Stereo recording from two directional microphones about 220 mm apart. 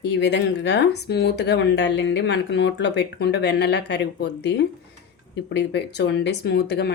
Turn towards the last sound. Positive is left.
turn(degrees=45)  # may be behind; listen again after turning